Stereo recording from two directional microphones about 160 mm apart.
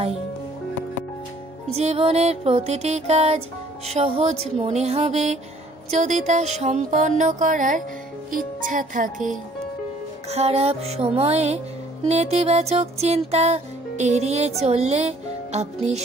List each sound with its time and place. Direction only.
1.7 s music: 40° right (ahead or behind)
10.3 s music: 40° right (ahead or behind)